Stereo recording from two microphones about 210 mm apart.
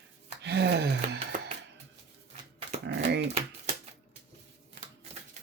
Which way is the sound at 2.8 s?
55° right (ahead or behind).